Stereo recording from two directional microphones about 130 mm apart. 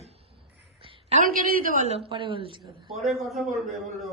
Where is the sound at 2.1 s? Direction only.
40° right (ahead or behind).